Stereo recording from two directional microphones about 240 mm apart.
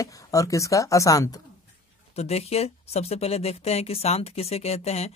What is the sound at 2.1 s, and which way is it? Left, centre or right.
Speech, left.